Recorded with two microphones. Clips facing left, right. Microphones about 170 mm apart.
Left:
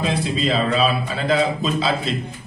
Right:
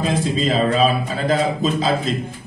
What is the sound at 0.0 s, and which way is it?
Speech, 45° right (ahead or behind).